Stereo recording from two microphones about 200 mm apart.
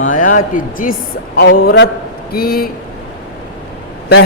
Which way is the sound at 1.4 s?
60° left (ahead or behind).